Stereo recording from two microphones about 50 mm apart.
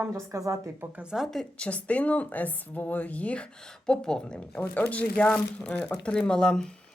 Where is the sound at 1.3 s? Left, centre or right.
Centre.